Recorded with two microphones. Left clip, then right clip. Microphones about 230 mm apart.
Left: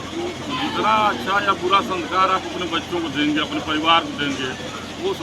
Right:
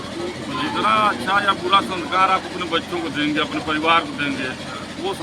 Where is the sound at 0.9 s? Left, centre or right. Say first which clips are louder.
Right 1 dB; centre.